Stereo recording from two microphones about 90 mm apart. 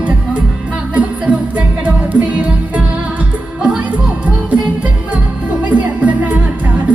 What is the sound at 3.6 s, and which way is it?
Music, 15° right (ahead or behind).